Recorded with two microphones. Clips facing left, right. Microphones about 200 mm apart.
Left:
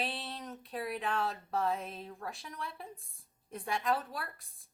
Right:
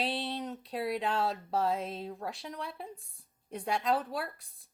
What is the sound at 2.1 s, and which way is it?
Speech, 25° right (ahead or behind).